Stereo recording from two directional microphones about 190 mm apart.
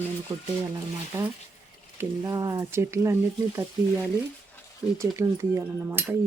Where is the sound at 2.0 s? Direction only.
20° right (ahead or behind).